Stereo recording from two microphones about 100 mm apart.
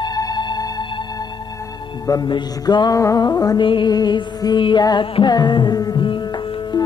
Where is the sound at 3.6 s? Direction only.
55° left (ahead or behind).